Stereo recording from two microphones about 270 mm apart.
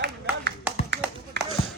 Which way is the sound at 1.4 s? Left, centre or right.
Right.